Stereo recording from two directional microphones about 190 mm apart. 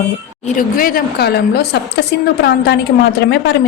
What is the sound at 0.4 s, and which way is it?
A woman's voice, 45° left (ahead or behind).